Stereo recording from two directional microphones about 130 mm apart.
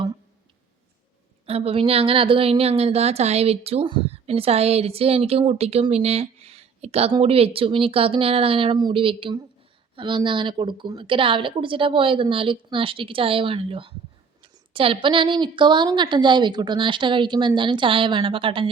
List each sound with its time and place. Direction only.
1.5 s a woman's voice: 50° right (ahead or behind)